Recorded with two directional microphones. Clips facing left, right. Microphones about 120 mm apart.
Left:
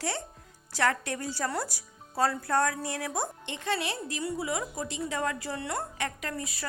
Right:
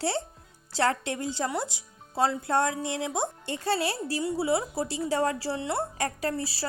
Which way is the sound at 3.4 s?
35° right (ahead or behind).